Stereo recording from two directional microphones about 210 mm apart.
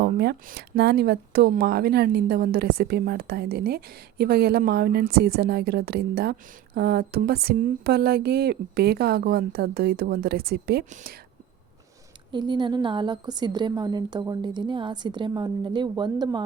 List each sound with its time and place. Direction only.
0.0 s speech: 50° right (ahead or behind)
12.3 s a woman's voice: 20° right (ahead or behind)